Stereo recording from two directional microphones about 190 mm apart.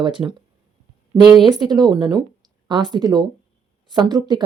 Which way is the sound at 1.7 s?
20° right (ahead or behind).